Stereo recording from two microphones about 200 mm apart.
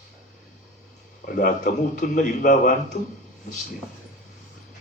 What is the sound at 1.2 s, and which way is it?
A man's voice, 45° left (ahead or behind).